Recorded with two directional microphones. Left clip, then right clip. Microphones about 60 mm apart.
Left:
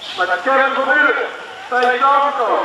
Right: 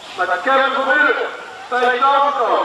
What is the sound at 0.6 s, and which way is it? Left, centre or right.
A man's voice, centre.